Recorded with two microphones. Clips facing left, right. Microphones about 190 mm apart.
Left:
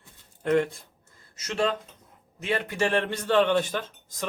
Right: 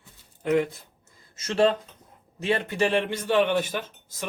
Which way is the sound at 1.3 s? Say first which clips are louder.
Right 5 dB; 30° right (ahead or behind).